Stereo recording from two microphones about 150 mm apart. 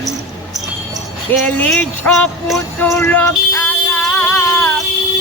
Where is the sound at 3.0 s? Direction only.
5° left (ahead or behind).